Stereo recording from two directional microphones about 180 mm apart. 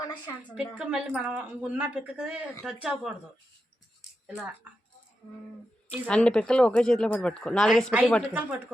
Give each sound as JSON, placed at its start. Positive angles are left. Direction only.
{"t": 0.8, "sound": "speech", "side_deg": -5}
{"t": 5.9, "sound": "speech", "side_deg": 5}
{"t": 8.3, "sound": "speech", "side_deg": -10}